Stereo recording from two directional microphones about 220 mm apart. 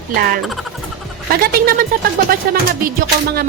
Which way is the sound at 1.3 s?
40° right (ahead or behind).